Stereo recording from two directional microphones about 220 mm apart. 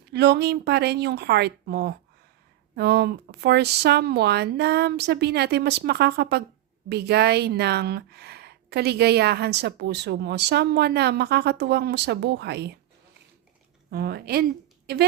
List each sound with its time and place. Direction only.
0.1 s a woman's voice: 50° right (ahead or behind)
13.9 s a woman's voice: 45° right (ahead or behind)